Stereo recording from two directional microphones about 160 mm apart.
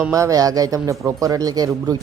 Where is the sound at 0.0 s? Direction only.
20° right (ahead or behind).